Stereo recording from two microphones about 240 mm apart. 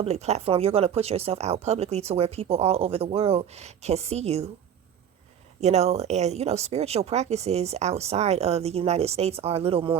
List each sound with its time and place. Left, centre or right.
0.0 s speech: right
5.5 s speech: right